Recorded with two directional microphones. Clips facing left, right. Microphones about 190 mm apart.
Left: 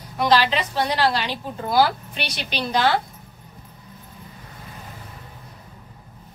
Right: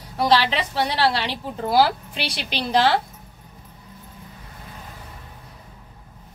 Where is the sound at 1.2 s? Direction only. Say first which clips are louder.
Right 1 dB; 30° right (ahead or behind).